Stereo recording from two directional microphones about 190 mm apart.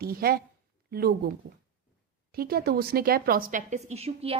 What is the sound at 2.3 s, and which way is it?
Speech, 55° right (ahead or behind).